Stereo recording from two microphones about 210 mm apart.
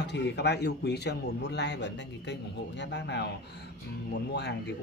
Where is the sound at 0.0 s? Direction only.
55° left (ahead or behind).